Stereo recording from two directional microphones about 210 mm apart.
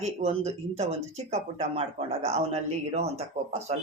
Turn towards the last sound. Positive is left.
turn(degrees=-30)  # may be behind; listen again after turning